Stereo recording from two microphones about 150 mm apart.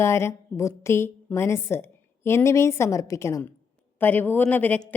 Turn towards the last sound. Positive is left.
turn(degrees=10)  # may be behind; listen again after turning